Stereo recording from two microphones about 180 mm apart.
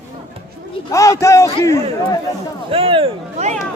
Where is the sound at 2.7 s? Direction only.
30° right (ahead or behind).